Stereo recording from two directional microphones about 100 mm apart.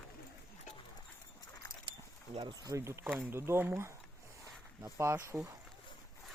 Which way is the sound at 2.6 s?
30° right (ahead or behind).